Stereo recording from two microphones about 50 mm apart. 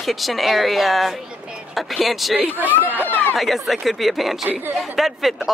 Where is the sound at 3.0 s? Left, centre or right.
Left.